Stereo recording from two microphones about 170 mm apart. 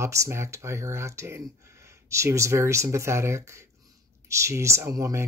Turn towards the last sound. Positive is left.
turn(degrees=-20)  # may be behind; listen again after turning